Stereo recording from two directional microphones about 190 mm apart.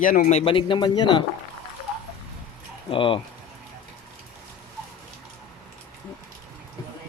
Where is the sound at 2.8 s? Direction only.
25° left (ahead or behind).